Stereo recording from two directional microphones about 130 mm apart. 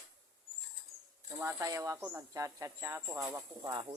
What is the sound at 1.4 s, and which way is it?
Speech, 20° right (ahead or behind).